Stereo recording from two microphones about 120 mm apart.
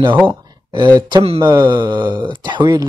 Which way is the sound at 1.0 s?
35° right (ahead or behind).